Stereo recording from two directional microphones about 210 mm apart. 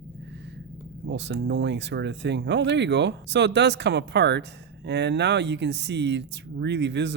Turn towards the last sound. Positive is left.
turn(degrees=-55)  # may be behind; listen again after turning